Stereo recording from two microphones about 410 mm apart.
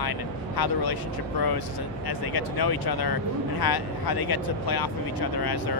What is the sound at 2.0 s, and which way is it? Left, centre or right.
Speech, left.